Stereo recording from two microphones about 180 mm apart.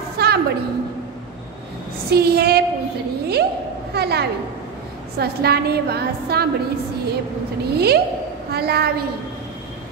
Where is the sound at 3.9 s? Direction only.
65° right (ahead or behind).